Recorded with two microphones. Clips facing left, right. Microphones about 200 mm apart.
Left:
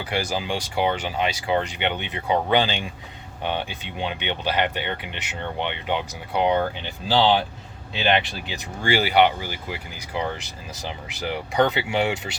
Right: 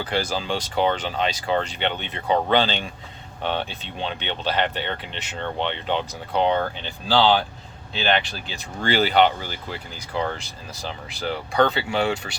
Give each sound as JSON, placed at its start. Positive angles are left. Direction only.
{"t": 0.0, "sound": "speech", "side_deg": 15}